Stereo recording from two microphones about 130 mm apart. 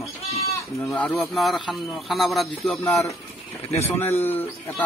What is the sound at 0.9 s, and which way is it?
A man's voice, centre (ahead or behind).